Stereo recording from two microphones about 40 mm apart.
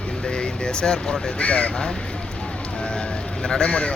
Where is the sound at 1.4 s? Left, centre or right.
Left.